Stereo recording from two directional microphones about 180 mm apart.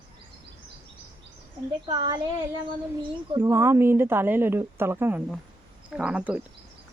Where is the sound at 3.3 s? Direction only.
15° right (ahead or behind).